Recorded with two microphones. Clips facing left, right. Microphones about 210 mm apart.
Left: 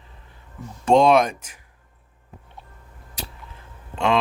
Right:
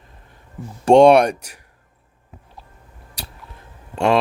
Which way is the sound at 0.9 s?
70° right (ahead or behind).